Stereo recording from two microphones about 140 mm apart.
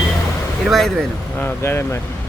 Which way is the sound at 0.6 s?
Centre (ahead or behind).